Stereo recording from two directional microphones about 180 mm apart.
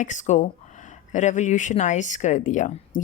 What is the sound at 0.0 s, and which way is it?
Speech, 45° left (ahead or behind).